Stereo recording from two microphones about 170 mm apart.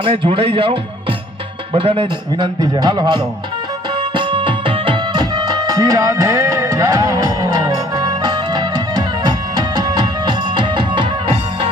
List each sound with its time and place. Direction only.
0.0 s a man's voice: 30° right (ahead or behind)
4.1 s music: 30° right (ahead or behind)